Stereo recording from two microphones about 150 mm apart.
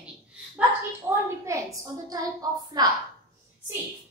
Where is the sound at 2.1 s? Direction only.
25° right (ahead or behind).